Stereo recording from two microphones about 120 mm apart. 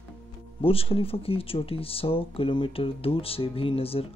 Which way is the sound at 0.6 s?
50° left (ahead or behind).